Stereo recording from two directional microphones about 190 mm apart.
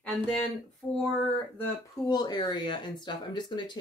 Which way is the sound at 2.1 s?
20° left (ahead or behind).